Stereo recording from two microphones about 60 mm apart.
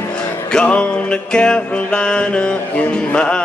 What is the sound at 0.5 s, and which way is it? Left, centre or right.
Music, centre.